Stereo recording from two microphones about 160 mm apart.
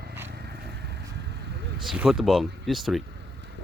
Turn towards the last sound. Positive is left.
turn(degrees=0)  # may be behind; listen again after turning